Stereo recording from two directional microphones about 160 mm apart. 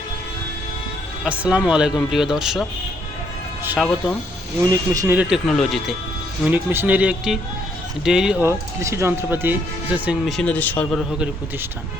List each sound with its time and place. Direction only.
1.2 s speech: 5° right (ahead or behind)
3.8 s speech: centre (ahead or behind)
4.6 s speech: 20° right (ahead or behind)
5.5 s speech: 5° left (ahead or behind)
6.4 s speech: 10° right (ahead or behind)
8.4 s speech: 15° right (ahead or behind); by 10.8 s 10° left (ahead or behind)